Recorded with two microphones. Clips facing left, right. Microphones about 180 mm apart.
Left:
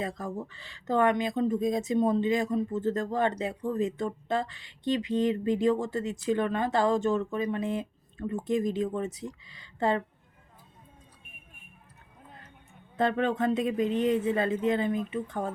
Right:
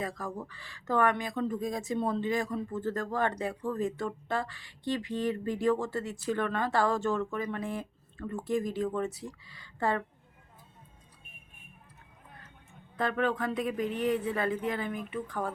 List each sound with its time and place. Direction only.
0.0 s speech: 25° left (ahead or behind)
13.0 s speech: 25° left (ahead or behind)